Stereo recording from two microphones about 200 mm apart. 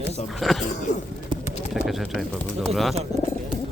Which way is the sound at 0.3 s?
Centre (ahead or behind).